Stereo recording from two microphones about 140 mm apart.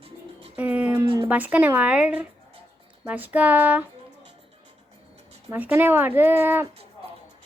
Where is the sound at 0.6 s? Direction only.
10° right (ahead or behind).